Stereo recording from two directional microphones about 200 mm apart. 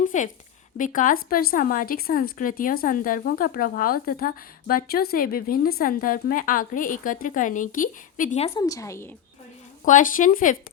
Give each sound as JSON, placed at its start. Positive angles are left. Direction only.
{"t": 0.0, "sound": "a woman's voice", "side_deg": 40}
{"t": 8.6, "sound": "a woman's voice", "side_deg": 15}
{"t": 9.8, "sound": "speech", "side_deg": 40}